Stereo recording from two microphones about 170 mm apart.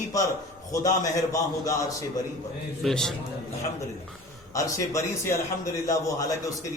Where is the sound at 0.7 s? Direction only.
20° left (ahead or behind).